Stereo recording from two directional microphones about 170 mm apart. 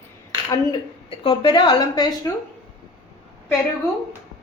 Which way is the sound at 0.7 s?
30° left (ahead or behind).